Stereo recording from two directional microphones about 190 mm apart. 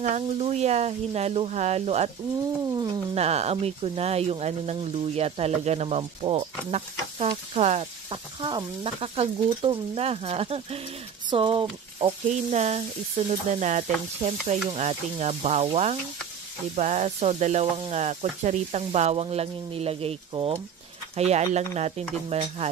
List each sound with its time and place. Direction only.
0.0 s speech: 35° right (ahead or behind)
2.7 s speech: 20° right (ahead or behind)
3.2 s speech: 35° right (ahead or behind)
8.4 s speech: 25° right (ahead or behind)
12.0 s speech: 35° right (ahead or behind)